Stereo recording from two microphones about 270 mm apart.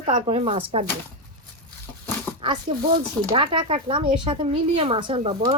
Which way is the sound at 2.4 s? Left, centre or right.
Centre.